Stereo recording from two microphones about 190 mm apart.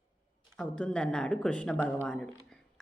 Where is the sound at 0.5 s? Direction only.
5° left (ahead or behind).